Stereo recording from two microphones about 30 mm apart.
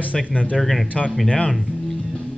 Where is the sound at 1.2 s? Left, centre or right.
Left.